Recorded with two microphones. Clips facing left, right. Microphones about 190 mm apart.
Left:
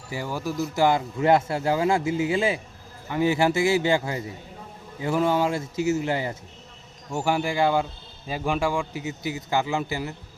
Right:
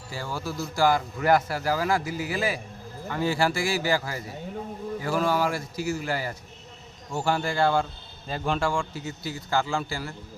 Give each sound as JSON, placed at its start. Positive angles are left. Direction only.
{"t": 0.1, "sound": "a man's voice", "side_deg": 15}